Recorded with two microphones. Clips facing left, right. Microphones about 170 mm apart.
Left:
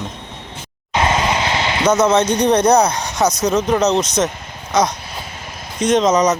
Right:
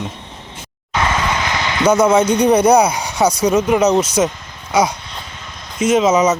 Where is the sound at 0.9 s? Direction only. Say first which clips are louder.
Left 1 dB; 25° left (ahead or behind).